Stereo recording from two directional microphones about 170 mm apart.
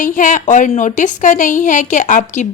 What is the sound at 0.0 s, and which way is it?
Speech, 50° left (ahead or behind).